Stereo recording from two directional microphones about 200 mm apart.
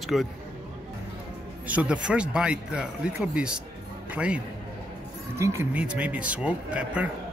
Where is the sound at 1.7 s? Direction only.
5° right (ahead or behind).